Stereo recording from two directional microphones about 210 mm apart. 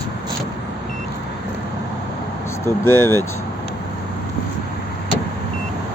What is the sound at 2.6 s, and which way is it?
Speech, 10° left (ahead or behind).